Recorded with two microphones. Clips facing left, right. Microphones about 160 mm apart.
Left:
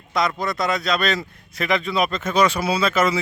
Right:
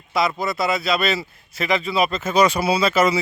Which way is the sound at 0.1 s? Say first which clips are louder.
Right 1 dB; 5° right (ahead or behind).